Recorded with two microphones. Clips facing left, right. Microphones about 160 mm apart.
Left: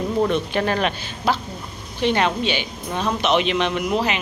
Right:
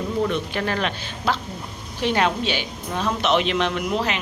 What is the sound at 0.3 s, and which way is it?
Speech, 25° left (ahead or behind).